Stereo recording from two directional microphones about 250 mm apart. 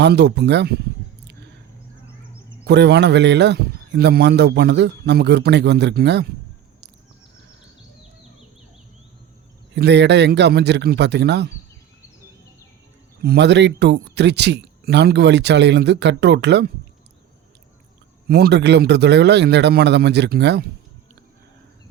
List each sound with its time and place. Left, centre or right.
0.0 s speech: right
2.6 s speech: right
9.7 s speech: right
13.2 s speech: right
18.3 s speech: right